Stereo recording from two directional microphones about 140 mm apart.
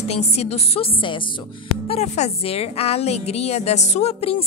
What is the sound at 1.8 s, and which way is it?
A woman's voice, 50° left (ahead or behind).